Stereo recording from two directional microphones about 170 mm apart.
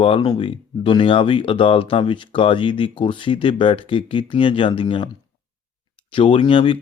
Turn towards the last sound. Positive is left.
turn(degrees=30)  # may be behind; listen again after turning